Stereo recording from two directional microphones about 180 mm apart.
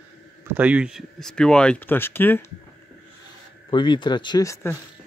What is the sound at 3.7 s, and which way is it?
Speech, 25° left (ahead or behind).